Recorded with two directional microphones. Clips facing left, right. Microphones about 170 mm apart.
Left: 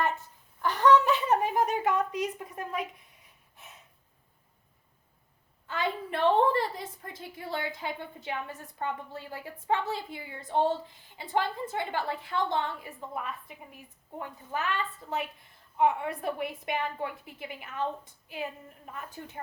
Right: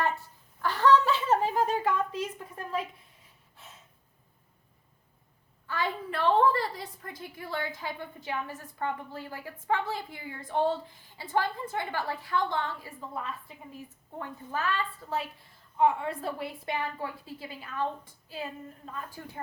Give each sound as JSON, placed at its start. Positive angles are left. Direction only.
{"t": 0.6, "sound": "a sound", "side_deg": 20}
{"t": 3.6, "sound": "snort", "side_deg": 20}
{"t": 5.6, "sound": "a woman's voice", "side_deg": 20}